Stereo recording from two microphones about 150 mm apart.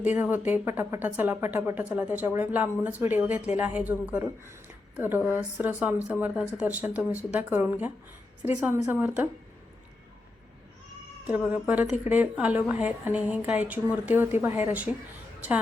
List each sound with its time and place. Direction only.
0.0 s speech: 10° right (ahead or behind)
11.3 s speech: 10° right (ahead or behind)